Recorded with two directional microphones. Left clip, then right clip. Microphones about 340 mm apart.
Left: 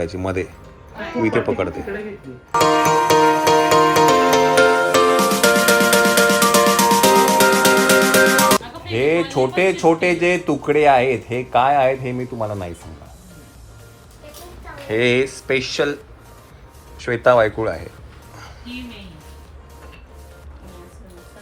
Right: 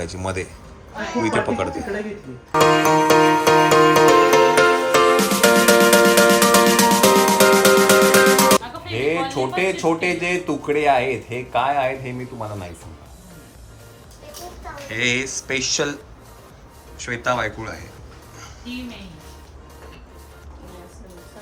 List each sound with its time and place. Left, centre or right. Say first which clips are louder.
0.0 s speech: left 4 dB; centre
2.5 s music: even; centre
10.7 s speech: left 4 dB; centre
14.8 s speech: left 5 dB; centre
17.0 s speech: left 8 dB; centre